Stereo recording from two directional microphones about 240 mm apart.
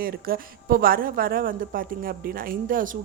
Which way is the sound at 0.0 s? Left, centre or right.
Right.